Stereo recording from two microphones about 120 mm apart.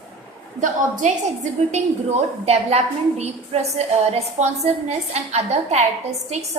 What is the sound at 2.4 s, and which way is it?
A woman's voice, 60° right (ahead or behind).